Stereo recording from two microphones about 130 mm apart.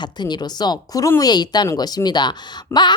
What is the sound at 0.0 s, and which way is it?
Speech, 35° left (ahead or behind).